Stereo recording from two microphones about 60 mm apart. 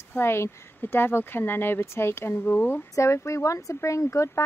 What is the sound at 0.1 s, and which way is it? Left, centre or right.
Speech, left.